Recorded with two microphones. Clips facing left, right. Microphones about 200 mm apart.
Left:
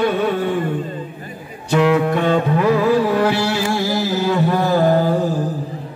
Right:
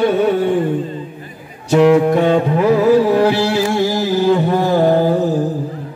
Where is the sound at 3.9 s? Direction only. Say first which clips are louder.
Right 4 dB; 20° right (ahead or behind).